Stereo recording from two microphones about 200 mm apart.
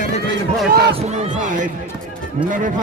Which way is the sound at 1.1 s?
35° right (ahead or behind).